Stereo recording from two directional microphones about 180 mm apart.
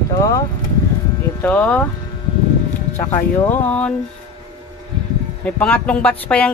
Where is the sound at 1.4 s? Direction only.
10° left (ahead or behind).